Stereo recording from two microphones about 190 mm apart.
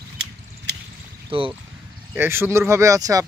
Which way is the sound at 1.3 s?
30° right (ahead or behind).